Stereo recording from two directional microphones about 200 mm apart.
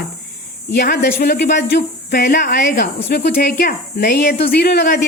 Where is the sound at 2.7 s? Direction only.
55° left (ahead or behind).